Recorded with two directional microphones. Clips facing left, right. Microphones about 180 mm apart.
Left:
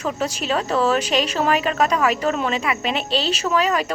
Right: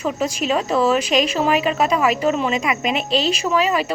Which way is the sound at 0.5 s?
10° right (ahead or behind).